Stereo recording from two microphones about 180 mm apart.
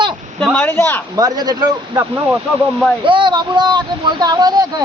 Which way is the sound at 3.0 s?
25° right (ahead or behind).